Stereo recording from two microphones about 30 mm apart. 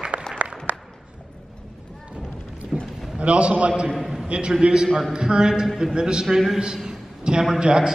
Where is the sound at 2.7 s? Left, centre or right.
Right.